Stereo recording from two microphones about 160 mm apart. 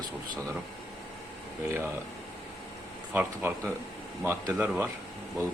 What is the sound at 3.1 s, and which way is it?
Speech, 10° right (ahead or behind).